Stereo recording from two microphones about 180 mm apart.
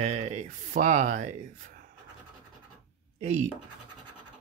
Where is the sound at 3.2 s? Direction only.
40° right (ahead or behind).